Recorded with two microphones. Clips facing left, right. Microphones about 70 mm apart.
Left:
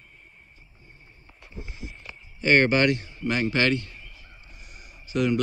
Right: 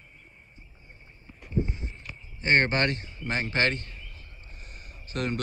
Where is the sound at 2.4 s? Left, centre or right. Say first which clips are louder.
Left 4 dB; right.